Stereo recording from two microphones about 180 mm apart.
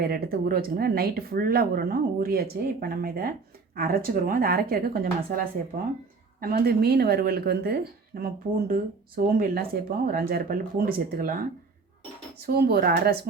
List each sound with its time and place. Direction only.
0.0 s speech: 55° right (ahead or behind)
6.4 s speech: 60° right (ahead or behind)